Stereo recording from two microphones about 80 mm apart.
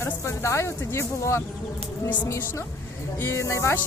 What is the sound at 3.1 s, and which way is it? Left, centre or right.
Speech, left.